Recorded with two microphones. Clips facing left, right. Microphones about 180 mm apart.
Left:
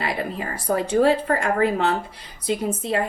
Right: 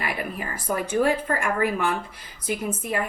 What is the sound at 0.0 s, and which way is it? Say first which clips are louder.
A woman's voice: left 3 dB; 25° left (ahead or behind).